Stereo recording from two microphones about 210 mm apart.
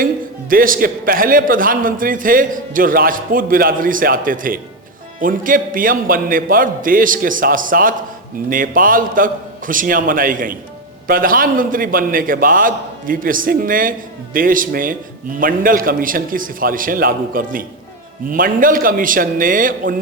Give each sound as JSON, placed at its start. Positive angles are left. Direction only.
{"t": 0.5, "sound": "a man's voice", "side_deg": -40}